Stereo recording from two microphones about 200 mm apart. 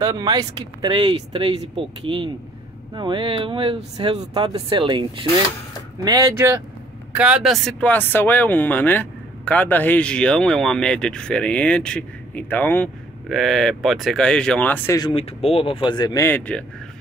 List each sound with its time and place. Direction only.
0.0 s speech: 20° right (ahead or behind)
6.0 s speech: 15° right (ahead or behind); by 15.0 s 10° left (ahead or behind)
15.0 s speech: 25° left (ahead or behind); by 16.6 s 10° left (ahead or behind)